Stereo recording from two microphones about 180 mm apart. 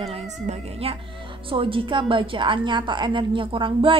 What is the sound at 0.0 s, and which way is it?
A woman's voice, 35° right (ahead or behind).